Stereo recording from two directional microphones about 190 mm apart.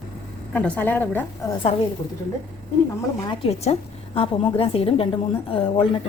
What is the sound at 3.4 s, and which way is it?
A woman's voice, 35° left (ahead or behind).